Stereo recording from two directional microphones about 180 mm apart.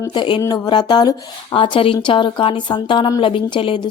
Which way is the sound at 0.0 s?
25° left (ahead or behind).